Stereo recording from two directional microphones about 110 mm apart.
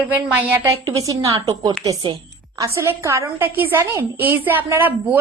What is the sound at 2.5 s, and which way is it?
A woman's voice, 30° right (ahead or behind).